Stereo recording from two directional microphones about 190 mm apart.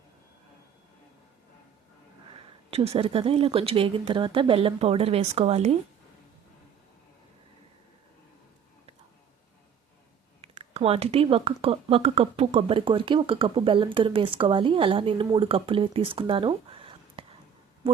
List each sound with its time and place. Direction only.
2.6 s speech: 30° right (ahead or behind)
10.4 s speech: 30° right (ahead or behind)